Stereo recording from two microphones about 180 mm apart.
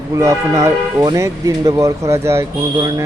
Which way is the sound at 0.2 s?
15° right (ahead or behind).